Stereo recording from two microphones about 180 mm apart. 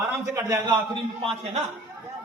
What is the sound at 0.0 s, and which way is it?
Speech, 20° right (ahead or behind).